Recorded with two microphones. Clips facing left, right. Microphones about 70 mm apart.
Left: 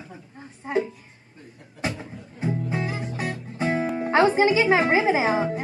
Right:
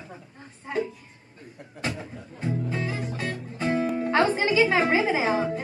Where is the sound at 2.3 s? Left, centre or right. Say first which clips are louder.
Left 2 dB; centre.